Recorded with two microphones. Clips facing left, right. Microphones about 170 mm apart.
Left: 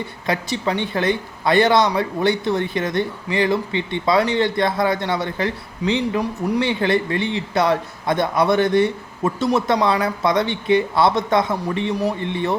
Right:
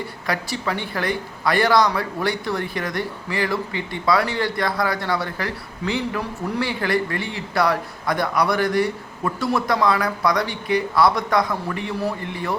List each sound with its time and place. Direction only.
0.3 s a man's voice: 20° left (ahead or behind)